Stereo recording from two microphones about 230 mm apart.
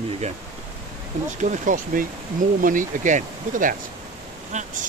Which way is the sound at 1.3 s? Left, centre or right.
Right.